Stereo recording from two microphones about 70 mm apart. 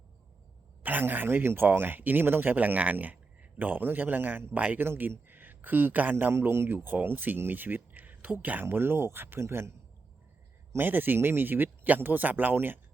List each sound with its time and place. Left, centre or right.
0.8 s speech: right
10.8 s speech: right